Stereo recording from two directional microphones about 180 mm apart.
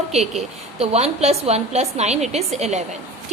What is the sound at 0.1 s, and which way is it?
A woman's voice, 35° right (ahead or behind).